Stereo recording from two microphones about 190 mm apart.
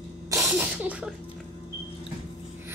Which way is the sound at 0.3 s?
10° right (ahead or behind).